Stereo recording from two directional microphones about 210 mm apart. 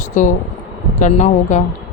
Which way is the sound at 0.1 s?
35° left (ahead or behind).